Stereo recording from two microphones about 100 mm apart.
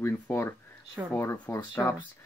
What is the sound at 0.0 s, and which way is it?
Speech, 25° left (ahead or behind).